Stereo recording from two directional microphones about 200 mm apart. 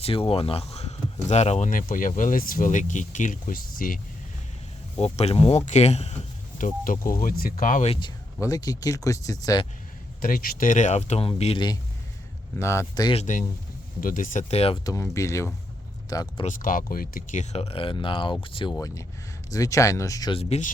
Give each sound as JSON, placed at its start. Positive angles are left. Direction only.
{"t": 0.0, "sound": "speech", "side_deg": 30}
{"t": 4.9, "sound": "speech", "side_deg": 30}
{"t": 7.9, "sound": "speech", "side_deg": 20}
{"t": 10.2, "sound": "speech", "side_deg": 45}
{"t": 13.1, "sound": "speech", "side_deg": 40}
{"t": 14.8, "sound": "speech", "side_deg": 15}
{"t": 16.5, "sound": "speech", "side_deg": 45}